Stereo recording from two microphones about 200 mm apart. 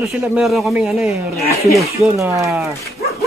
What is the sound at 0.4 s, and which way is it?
Speech, centre (ahead or behind).